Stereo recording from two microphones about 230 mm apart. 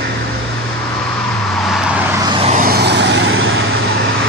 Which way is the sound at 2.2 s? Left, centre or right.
Right.